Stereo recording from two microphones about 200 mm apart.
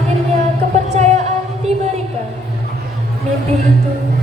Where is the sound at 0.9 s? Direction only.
35° right (ahead or behind).